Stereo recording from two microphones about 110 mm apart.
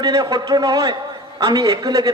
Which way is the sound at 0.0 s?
35° right (ahead or behind).